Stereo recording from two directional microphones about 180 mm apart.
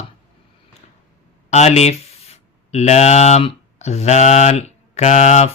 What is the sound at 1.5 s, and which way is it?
Speech, 40° left (ahead or behind).